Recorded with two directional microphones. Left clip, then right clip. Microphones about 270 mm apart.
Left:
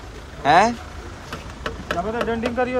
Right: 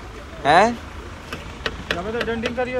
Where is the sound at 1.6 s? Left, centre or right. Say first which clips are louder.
Left 1 dB; left.